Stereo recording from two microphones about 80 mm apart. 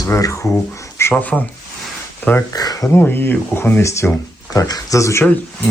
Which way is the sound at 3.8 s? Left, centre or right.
Left.